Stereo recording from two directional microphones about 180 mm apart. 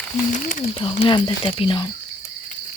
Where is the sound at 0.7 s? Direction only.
30° left (ahead or behind).